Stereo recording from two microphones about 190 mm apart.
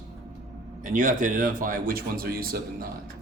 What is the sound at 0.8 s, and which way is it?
Speech, 45° right (ahead or behind).